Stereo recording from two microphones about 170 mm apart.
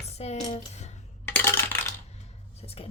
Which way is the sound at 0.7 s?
40° left (ahead or behind).